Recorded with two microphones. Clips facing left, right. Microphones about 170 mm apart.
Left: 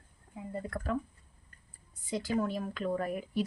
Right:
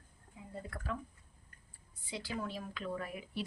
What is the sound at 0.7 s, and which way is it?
Speech, 45° left (ahead or behind).